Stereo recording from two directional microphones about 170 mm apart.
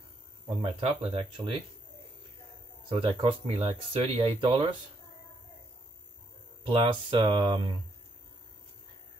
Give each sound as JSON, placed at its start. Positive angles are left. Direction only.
{"t": 0.6, "sound": "speech", "side_deg": -35}
{"t": 2.9, "sound": "speech", "side_deg": -30}
{"t": 6.6, "sound": "speech", "side_deg": -30}